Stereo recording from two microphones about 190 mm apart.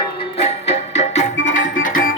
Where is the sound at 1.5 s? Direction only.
45° left (ahead or behind).